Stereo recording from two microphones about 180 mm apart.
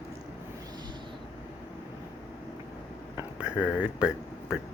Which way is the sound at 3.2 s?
5° right (ahead or behind).